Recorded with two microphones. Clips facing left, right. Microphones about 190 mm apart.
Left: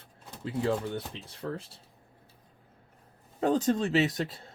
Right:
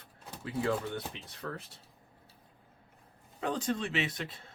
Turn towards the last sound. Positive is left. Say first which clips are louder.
# left 8 dB
turn(degrees=35)  # may be behind; listen again after turning